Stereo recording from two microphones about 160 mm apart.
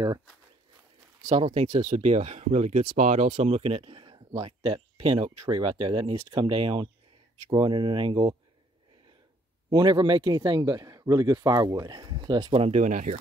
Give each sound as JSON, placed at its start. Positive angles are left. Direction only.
{"t": 1.4, "sound": "speech", "side_deg": -35}
{"t": 3.3, "sound": "speech", "side_deg": -40}
{"t": 9.7, "sound": "speech", "side_deg": -25}